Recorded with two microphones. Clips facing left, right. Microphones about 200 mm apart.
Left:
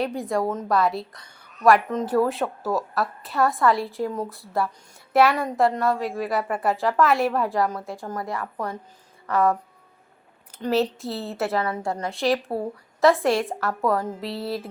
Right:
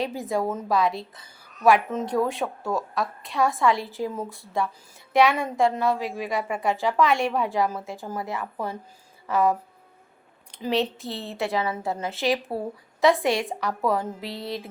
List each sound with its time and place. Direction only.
0.0 s a woman's voice: centre (ahead or behind)